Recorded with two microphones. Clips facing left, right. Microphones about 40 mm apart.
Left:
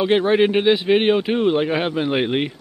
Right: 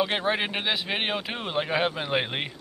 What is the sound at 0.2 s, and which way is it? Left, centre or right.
Speech, centre.